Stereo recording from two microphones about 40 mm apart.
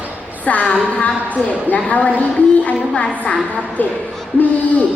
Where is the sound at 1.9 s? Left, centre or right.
Left.